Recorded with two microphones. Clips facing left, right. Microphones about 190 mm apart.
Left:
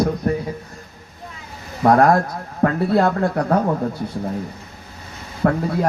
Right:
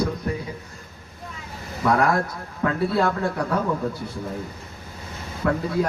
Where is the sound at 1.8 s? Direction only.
55° left (ahead or behind).